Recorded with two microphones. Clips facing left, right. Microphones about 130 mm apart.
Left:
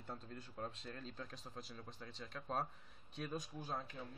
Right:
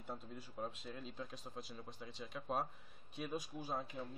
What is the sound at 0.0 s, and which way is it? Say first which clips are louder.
Speech: right 2 dB; 5° right (ahead or behind).